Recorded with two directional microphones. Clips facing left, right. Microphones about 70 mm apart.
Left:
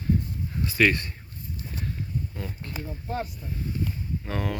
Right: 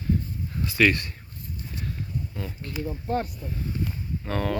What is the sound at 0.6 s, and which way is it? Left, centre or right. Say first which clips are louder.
Speech: right 1 dB; left.